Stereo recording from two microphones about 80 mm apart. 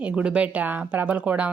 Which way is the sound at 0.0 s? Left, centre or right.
Centre.